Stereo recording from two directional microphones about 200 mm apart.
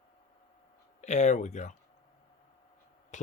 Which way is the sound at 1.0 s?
35° left (ahead or behind).